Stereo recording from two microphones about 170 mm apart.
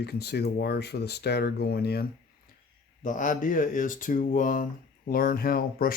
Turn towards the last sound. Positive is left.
turn(degrees=60)  # may be behind; listen again after turning